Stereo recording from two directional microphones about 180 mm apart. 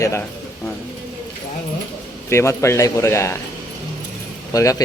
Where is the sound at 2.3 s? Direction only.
15° left (ahead or behind).